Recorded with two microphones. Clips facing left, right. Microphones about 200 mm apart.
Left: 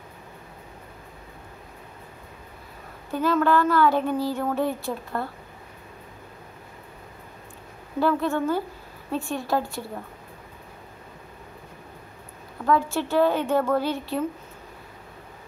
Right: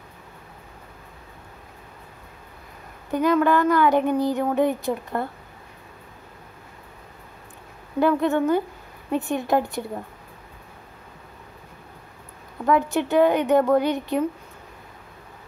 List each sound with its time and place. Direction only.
3.1 s speech: 15° right (ahead or behind)
8.0 s a woman's voice: 20° right (ahead or behind)
12.6 s speech: 20° right (ahead or behind)